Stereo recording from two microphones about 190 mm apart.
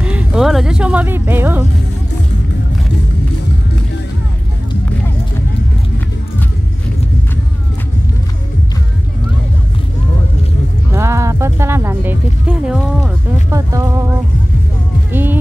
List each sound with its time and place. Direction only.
0.0 s speech: 5° right (ahead or behind)
11.0 s music: 15° right (ahead or behind)
13.5 s a sound: 15° right (ahead or behind)